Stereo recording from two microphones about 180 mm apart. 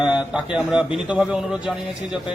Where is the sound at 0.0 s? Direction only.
5° right (ahead or behind).